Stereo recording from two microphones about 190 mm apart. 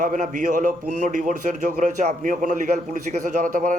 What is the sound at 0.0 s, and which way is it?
Speech, 40° right (ahead or behind).